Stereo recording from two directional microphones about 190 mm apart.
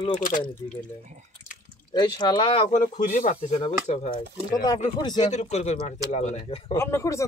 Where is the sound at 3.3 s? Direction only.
25° left (ahead or behind).